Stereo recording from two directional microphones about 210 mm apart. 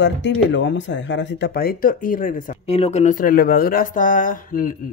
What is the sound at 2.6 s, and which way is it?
Speech, 30° left (ahead or behind).